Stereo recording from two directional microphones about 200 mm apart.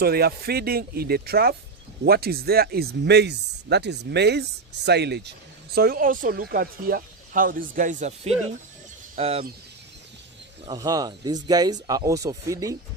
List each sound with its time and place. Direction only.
0.0 s speech: 50° right (ahead or behind); by 9.5 s 30° right (ahead or behind)
10.7 s speech: 20° right (ahead or behind)